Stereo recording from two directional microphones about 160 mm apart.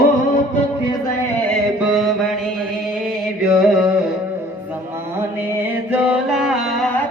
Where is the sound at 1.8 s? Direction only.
5° right (ahead or behind).